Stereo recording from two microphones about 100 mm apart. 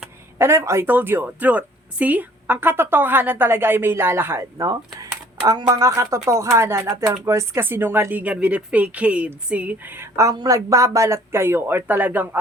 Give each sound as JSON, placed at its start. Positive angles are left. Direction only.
{"t": 0.3, "sound": "speech", "side_deg": -25}
{"t": 4.5, "sound": "speech", "side_deg": -35}
{"t": 10.3, "sound": "speech", "side_deg": -40}